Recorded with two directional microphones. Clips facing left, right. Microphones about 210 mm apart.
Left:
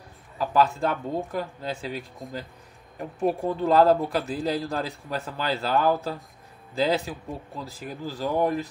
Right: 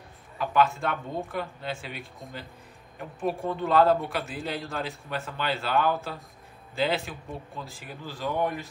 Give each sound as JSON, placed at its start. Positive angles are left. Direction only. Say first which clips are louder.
{"t": 0.4, "sound": "a man's voice", "louder": "left 2 dB", "side_deg": 35}